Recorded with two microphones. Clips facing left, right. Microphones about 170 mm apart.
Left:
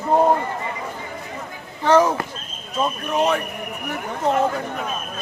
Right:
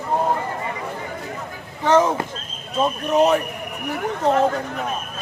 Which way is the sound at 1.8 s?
20° right (ahead or behind).